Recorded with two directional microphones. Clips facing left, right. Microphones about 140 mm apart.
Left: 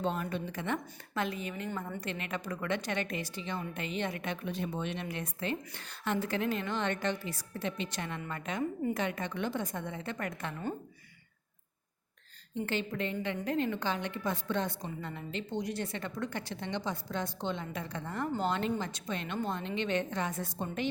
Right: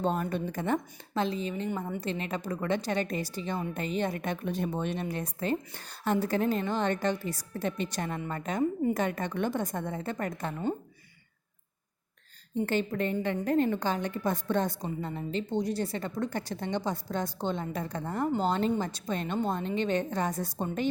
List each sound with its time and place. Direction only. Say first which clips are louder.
0.0 s a woman's voice: right 4 dB; 40° right (ahead or behind)
12.6 s a woman's voice: right 5 dB; 45° right (ahead or behind)